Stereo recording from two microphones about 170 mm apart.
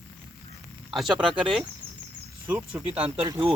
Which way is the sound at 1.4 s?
Centre (ahead or behind).